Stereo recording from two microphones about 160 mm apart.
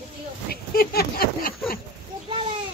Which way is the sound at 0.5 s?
70° left (ahead or behind).